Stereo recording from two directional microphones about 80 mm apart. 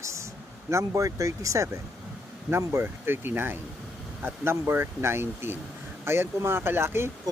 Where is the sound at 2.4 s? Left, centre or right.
Right.